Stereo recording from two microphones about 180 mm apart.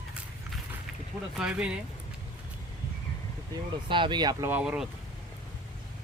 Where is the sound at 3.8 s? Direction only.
25° right (ahead or behind); by 4.9 s 5° right (ahead or behind).